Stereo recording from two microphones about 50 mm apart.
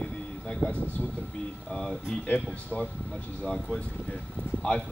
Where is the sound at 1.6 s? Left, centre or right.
Centre.